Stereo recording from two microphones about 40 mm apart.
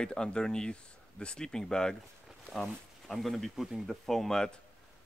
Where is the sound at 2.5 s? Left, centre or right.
Centre.